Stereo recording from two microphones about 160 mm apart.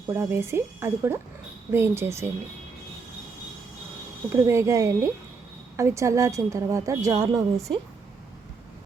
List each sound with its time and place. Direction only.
0.1 s speech: 15° right (ahead or behind)
4.3 s a woman's voice: 15° right (ahead or behind)